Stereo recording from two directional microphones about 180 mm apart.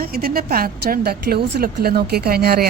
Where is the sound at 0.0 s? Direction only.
60° right (ahead or behind).